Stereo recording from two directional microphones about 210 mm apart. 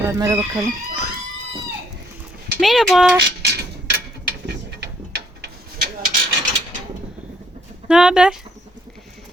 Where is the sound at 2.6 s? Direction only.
Centre (ahead or behind).